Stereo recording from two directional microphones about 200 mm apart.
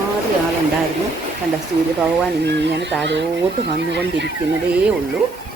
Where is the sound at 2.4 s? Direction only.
60° right (ahead or behind).